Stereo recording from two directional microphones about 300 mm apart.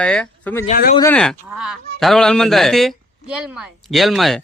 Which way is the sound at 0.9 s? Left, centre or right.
Centre.